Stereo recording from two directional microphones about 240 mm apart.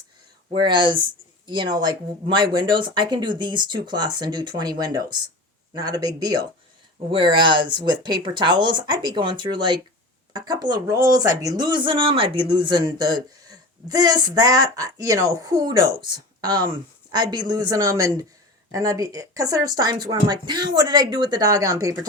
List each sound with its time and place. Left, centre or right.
0.5 s speech: centre